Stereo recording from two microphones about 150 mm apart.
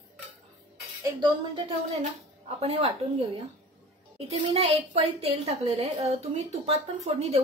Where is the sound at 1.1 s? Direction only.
40° right (ahead or behind).